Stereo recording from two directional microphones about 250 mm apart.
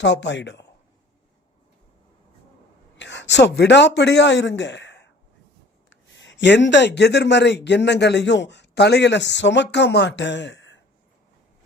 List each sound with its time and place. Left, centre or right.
0.0 s speech: left
3.0 s speech: left